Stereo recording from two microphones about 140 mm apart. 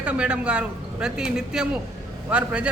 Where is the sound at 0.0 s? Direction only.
10° right (ahead or behind).